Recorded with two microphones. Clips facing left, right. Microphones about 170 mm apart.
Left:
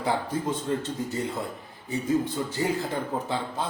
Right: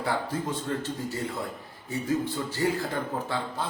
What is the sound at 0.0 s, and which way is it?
A man's voice, 20° left (ahead or behind).